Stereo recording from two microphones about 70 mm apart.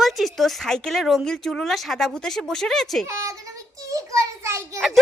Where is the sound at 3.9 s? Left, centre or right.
Right.